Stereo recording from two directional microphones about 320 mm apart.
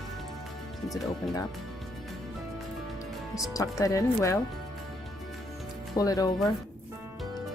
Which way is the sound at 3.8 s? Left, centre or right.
Centre.